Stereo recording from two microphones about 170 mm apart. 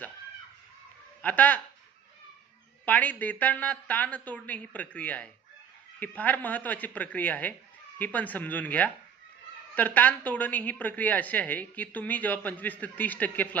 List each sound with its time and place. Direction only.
1.2 s a woman's voice: 10° left (ahead or behind)
2.8 s a woman's voice: 10° left (ahead or behind)